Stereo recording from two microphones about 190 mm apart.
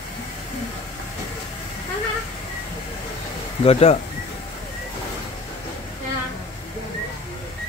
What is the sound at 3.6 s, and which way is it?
Speech, 30° left (ahead or behind).